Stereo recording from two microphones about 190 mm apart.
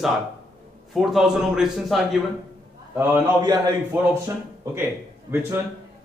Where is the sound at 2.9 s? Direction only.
20° right (ahead or behind).